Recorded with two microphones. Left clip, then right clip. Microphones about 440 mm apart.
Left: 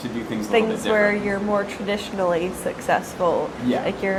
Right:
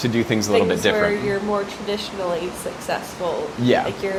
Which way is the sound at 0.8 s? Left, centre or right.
Right.